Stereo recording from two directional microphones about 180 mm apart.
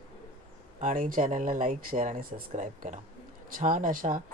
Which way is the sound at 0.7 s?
45° right (ahead or behind).